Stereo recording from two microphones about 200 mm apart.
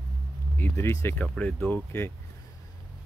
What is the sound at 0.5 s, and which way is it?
Speech, 15° left (ahead or behind).